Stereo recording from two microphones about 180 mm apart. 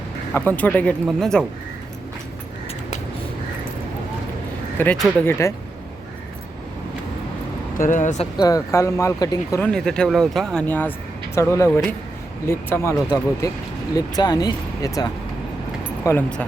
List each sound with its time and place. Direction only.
0.3 s speech: 10° left (ahead or behind)
4.8 s speech: 10° left (ahead or behind)
7.8 s speech: 45° left (ahead or behind)
8.4 s speech: 20° left (ahead or behind)
9.6 s speech: 5° left (ahead or behind)